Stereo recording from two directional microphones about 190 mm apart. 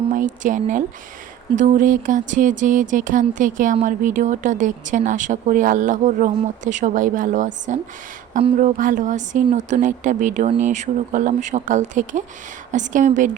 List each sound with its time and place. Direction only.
0.1 s speech: 45° right (ahead or behind)